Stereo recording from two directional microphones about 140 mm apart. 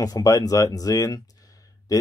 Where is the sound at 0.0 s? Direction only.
25° left (ahead or behind).